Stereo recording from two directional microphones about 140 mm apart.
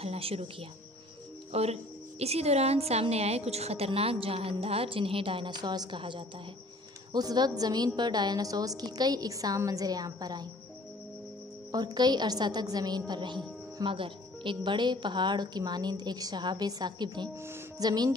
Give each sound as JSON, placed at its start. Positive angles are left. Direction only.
{"t": 0.0, "sound": "a woman's voice", "side_deg": -45}
{"t": 11.7, "sound": "a woman's voice", "side_deg": -30}
{"t": 17.4, "sound": "music", "side_deg": -20}
{"t": 17.8, "sound": "a woman's voice", "side_deg": -30}